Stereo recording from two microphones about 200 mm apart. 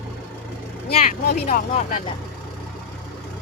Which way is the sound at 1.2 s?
45° left (ahead or behind).